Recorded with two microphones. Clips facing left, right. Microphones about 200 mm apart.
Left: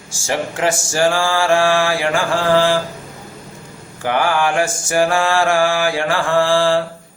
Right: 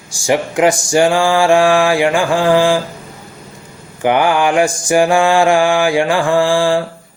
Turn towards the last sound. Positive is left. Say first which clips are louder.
# right 2 dB
turn(degrees=-15)  # may be behind; listen again after turning